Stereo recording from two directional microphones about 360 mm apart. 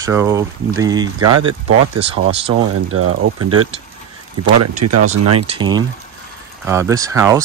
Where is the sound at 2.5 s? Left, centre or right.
Right.